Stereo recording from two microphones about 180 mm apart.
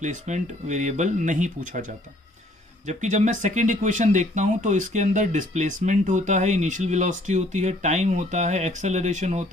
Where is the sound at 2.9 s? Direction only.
40° right (ahead or behind).